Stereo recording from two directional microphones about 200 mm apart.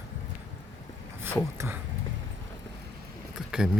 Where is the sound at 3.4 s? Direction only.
5° right (ahead or behind).